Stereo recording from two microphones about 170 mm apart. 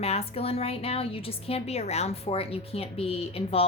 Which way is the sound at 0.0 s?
35° left (ahead or behind).